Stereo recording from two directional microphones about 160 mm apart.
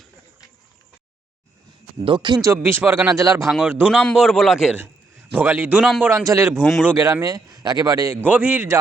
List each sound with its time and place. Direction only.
2.0 s speech: 30° right (ahead or behind)
2.6 s speech: 15° right (ahead or behind)
3.8 s a man's voice: 5° left (ahead or behind)
5.3 s speech: 15° right (ahead or behind)
6.2 s speech: 20° right (ahead or behind)
6.6 s a man's voice: centre (ahead or behind)
6.8 s speech: 20° right (ahead or behind)
8.3 s speech: 10° right (ahead or behind)